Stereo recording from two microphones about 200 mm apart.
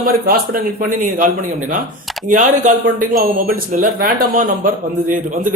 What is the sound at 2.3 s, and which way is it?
Speech, 40° right (ahead or behind).